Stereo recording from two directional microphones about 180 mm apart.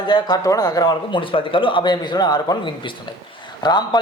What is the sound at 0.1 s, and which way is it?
A man's voice, 20° left (ahead or behind).